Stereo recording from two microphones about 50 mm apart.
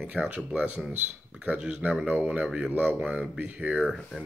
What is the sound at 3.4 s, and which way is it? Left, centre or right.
Speech, right.